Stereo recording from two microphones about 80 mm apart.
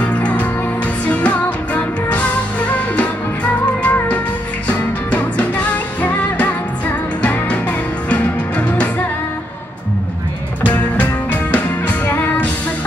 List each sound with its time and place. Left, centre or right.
0.0 s music: centre
4.6 s music: centre
10.7 s music: centre